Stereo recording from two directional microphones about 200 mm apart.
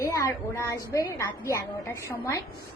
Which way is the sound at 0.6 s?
15° left (ahead or behind).